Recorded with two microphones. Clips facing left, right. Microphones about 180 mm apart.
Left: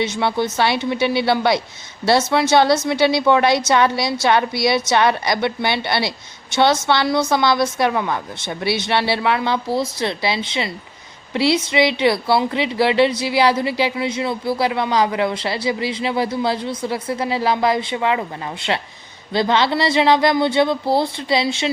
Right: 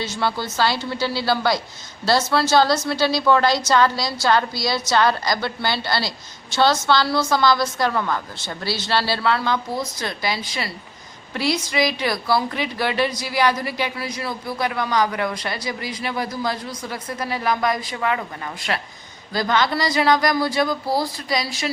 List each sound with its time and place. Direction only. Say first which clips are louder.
0.0 s a woman's voice: left 5 dB; 20° left (ahead or behind)